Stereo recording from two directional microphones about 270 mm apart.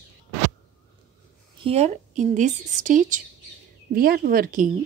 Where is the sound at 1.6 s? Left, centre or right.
Right.